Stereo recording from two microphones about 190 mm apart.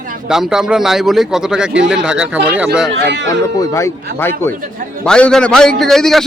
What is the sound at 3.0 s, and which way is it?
Speech, 70° right (ahead or behind).